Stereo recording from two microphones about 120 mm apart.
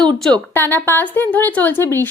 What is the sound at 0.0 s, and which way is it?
Speech, 5° left (ahead or behind).